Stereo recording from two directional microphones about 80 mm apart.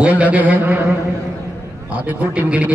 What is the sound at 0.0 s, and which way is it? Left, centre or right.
A man's voice, centre.